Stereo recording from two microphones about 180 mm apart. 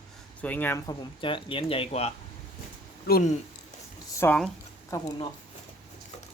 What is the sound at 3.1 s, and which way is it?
Speech, 55° left (ahead or behind).